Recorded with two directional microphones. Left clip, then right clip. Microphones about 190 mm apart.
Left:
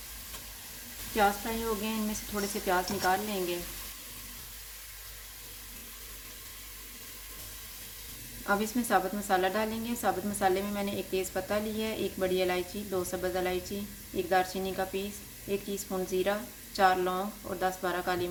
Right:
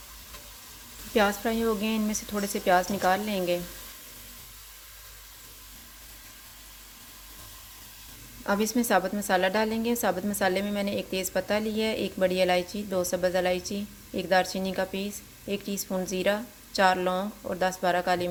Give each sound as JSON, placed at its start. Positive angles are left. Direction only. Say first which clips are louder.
{"t": 1.1, "sound": "a woman's voice", "louder": "right 3 dB", "side_deg": -45}
{"t": 8.4, "sound": "a woman's voice", "louder": "right 4 dB", "side_deg": -45}